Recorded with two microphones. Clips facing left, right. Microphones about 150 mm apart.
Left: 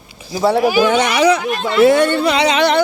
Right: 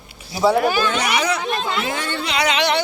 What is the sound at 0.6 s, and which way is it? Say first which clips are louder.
Speech: left 6 dB; 10° left (ahead or behind).